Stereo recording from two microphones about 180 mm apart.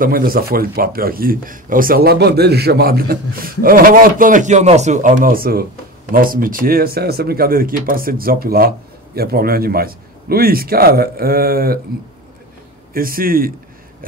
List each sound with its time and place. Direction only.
0.0 s speech: 50° right (ahead or behind)
12.9 s speech: 55° right (ahead or behind)